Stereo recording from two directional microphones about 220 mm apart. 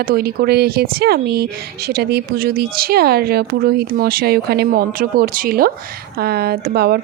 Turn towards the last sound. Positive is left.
turn(degrees=-45)  # may be behind; listen again after turning